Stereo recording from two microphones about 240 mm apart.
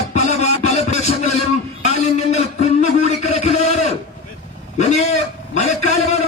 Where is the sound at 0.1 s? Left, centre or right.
Left.